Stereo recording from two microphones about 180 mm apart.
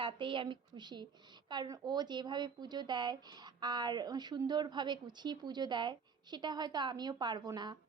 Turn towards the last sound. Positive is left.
turn(degrees=-20)  # may be behind; listen again after turning